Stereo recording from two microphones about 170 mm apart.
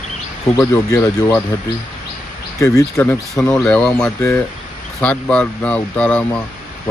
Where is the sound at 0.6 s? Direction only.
15° left (ahead or behind).